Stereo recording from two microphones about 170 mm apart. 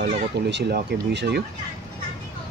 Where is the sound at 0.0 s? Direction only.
80° right.